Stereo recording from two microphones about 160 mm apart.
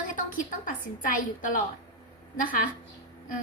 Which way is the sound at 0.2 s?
55° left (ahead or behind).